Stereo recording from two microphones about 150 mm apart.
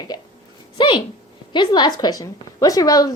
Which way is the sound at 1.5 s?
30° left (ahead or behind).